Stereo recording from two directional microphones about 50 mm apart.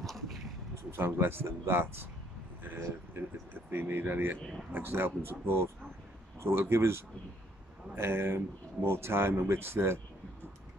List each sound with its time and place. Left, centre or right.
0.0 s a sound: centre
0.9 s speech: right
3.7 s speech: right